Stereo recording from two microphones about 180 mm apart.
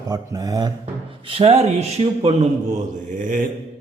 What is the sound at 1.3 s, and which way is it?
Speech, 35° right (ahead or behind).